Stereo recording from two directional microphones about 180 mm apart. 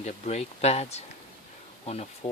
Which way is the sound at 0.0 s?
35° left (ahead or behind).